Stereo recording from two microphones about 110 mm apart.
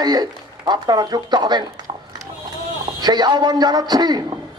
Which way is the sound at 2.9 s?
40° right (ahead or behind).